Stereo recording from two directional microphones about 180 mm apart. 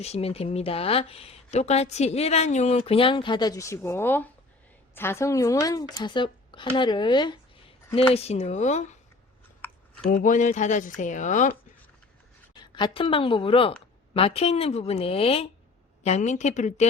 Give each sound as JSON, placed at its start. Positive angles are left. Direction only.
{"t": 0.0, "sound": "speech", "side_deg": 35}
{"t": 9.6, "sound": "chewing", "side_deg": 10}
{"t": 10.1, "sound": "speech", "side_deg": 50}
{"t": 12.5, "sound": "a woman's voice", "side_deg": 25}